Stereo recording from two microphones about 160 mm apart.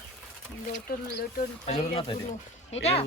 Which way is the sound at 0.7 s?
65° left (ahead or behind).